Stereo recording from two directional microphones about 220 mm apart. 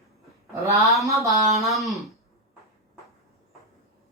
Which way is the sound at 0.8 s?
Centre (ahead or behind).